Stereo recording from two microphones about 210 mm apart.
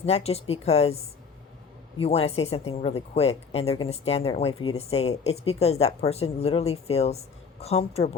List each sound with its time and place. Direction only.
0.0 s speech: 30° left (ahead or behind)
2.0 s speech: 30° left (ahead or behind)